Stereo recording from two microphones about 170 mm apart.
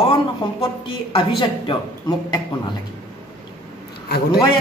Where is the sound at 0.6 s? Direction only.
30° left (ahead or behind).